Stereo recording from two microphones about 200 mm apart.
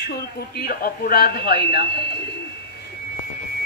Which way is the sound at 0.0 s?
50° left (ahead or behind).